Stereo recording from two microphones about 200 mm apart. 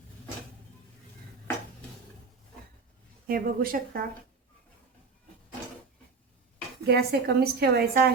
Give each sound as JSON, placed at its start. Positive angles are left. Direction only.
{"t": 3.2, "sound": "a woman's voice", "side_deg": -45}
{"t": 6.8, "sound": "a woman's voice", "side_deg": -50}